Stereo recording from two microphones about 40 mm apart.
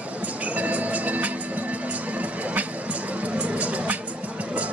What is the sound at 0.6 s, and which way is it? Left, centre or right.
Music, right.